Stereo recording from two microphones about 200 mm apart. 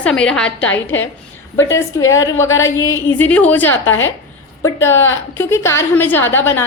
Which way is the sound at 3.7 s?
80° left.